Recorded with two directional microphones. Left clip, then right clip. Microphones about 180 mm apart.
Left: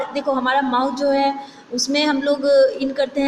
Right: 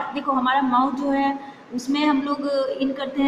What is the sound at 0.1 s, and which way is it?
A woman's voice, 15° left (ahead or behind).